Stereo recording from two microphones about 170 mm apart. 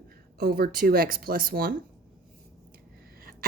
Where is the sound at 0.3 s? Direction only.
65° right (ahead or behind).